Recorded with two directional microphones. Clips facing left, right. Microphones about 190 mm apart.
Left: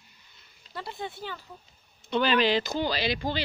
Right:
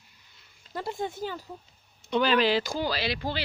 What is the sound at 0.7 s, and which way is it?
Speech, 45° right (ahead or behind).